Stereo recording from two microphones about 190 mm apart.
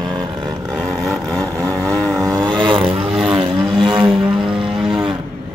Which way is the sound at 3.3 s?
25° right (ahead or behind).